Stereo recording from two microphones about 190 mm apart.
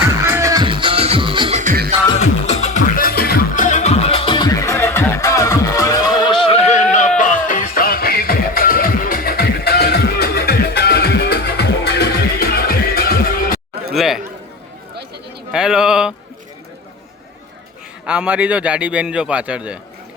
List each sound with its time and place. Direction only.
0.0 s music: 15° right (ahead or behind); by 1.9 s 45° right (ahead or behind)
2.1 s music: 35° left (ahead or behind); by 13.6 s 50° left (ahead or behind)
13.9 s chatter: centre (ahead or behind)
15.5 s a sound: 5° right (ahead or behind)
18.0 s a man's voice: 5° right (ahead or behind)